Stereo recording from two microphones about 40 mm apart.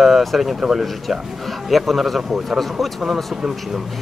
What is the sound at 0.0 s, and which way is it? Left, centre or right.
Speech, centre.